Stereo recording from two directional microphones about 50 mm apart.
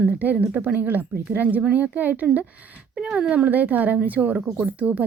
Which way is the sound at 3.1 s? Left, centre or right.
Right.